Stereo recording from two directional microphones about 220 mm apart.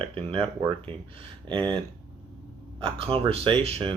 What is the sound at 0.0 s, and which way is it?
Speech, 25° right (ahead or behind).